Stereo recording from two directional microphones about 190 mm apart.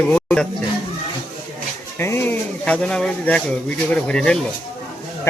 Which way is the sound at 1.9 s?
10° left (ahead or behind).